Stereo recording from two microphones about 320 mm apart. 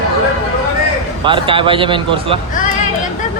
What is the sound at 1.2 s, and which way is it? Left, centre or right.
Speech, centre.